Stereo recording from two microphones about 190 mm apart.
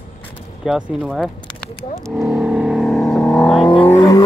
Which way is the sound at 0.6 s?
Centre (ahead or behind).